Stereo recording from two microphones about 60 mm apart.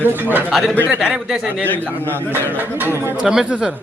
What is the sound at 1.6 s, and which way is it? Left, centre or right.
Speech, left.